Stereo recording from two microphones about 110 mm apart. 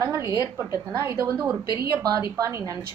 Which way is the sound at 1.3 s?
10° right (ahead or behind).